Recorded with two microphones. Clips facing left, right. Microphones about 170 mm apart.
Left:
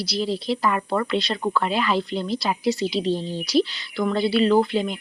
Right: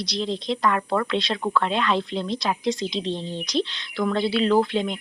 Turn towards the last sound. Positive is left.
turn(degrees=5)  # may be behind; listen again after turning